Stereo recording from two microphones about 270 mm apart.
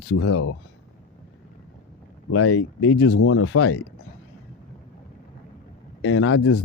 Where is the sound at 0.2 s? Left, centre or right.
Left.